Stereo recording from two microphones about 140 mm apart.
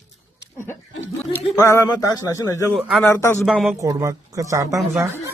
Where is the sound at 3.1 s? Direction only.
20° left (ahead or behind).